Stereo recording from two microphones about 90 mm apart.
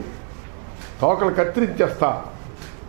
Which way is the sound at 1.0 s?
20° right (ahead or behind).